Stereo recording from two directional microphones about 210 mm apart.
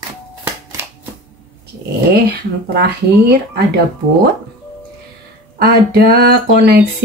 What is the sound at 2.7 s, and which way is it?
Speech, 50° right (ahead or behind).